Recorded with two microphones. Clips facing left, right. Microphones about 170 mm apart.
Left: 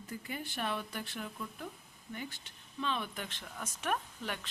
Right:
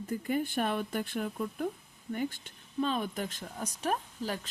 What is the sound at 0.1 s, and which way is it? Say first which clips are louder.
Speech: right 11 dB; 50° right (ahead or behind).